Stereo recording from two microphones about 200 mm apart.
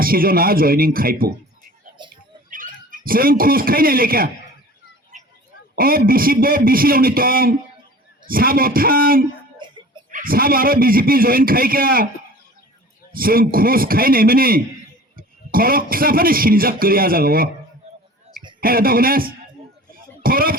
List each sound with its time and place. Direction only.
0.0 s a man's voice: 45° right (ahead or behind)
2.0 s a sound: 25° right (ahead or behind)
2.5 s speech: 45° right (ahead or behind)
5.7 s a man's voice: 45° right (ahead or behind)
9.6 s music: 25° right (ahead or behind)
10.1 s a man's voice: 45° right (ahead or behind)
13.1 s a man's voice: 45° right (ahead or behind)
18.6 s a man's voice: 45° right (ahead or behind)
19.9 s music: 45° right (ahead or behind)